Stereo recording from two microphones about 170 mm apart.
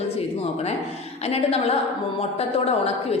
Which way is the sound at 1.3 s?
35° left (ahead or behind).